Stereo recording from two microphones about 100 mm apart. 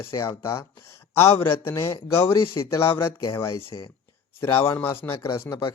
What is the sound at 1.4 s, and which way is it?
Speech, 25° left (ahead or behind).